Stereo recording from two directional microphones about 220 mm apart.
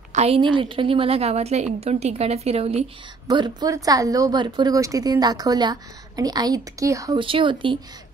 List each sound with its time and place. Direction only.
0.1 s a woman's voice: 30° right (ahead or behind)